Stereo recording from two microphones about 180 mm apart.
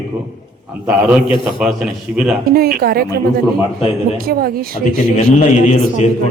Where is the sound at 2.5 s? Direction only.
55° right (ahead or behind).